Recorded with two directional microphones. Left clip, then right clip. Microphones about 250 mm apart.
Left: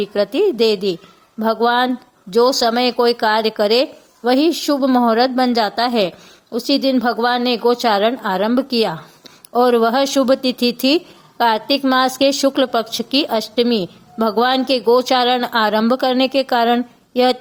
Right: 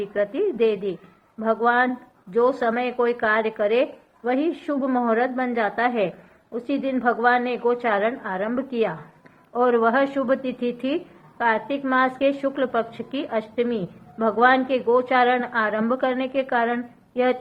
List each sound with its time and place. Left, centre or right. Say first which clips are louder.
0.0 s speech: left 7 dB; left